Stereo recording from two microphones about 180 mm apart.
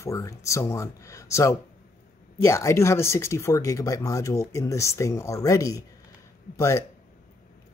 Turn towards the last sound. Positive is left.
turn(degrees=15)  # may be behind; listen again after turning